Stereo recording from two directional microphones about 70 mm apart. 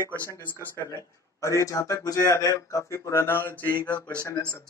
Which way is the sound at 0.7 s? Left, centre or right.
Left.